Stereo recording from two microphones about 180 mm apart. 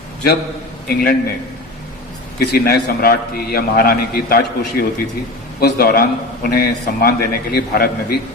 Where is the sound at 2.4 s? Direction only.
60° left (ahead or behind).